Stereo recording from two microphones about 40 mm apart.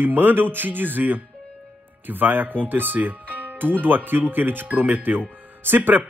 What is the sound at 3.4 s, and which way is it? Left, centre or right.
Music, right.